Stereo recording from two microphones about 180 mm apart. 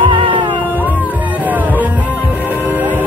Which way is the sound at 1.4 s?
10° right (ahead or behind).